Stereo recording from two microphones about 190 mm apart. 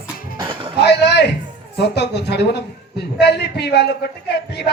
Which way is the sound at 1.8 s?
60° left (ahead or behind).